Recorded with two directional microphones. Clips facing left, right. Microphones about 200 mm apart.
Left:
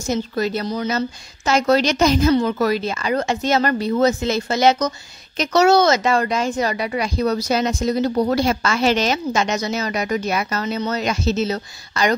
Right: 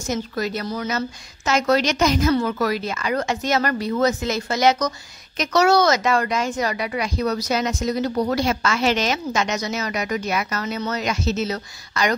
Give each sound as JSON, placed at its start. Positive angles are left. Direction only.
{"t": 0.1, "sound": "a woman's voice", "side_deg": 30}